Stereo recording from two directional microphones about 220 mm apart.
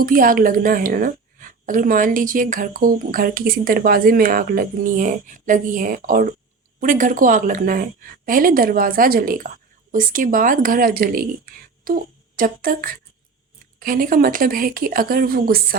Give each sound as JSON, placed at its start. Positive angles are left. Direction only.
{"t": 0.0, "sound": "a woman's voice", "side_deg": -40}